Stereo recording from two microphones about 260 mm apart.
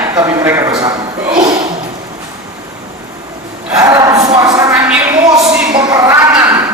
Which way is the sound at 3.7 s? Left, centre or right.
Centre.